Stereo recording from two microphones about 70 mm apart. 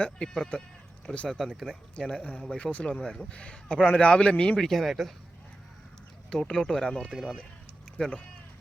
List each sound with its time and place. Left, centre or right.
0.0 s a man's voice: centre
1.3 s speech: centre
2.0 s a man's voice: centre
4.6 s speech: centre
6.3 s a man's voice: centre
7.1 s speech: centre
7.9 s a man's voice: centre